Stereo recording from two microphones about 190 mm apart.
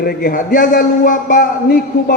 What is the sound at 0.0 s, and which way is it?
A man's voice, 50° left (ahead or behind).